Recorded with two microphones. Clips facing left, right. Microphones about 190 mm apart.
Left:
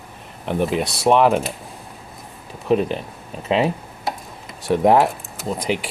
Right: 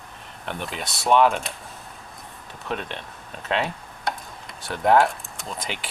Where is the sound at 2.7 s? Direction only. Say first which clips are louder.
Left 12 dB; 5° left (ahead or behind).